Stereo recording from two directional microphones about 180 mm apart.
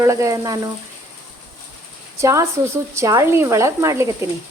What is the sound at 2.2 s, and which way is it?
Speech, 15° right (ahead or behind).